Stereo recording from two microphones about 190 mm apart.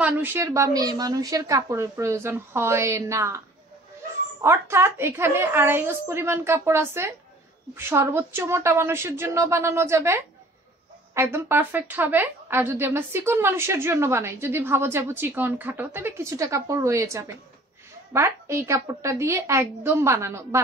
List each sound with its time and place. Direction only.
0.0 s a woman's voice: 10° right (ahead or behind)